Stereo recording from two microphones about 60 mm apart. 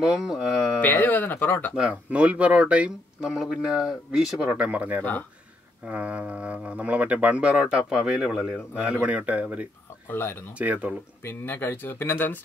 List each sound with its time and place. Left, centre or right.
0.0 s speech: centre
0.7 s speech: left
1.8 s speech: right
10.0 s speech: left
10.6 s speech: right
11.2 s speech: left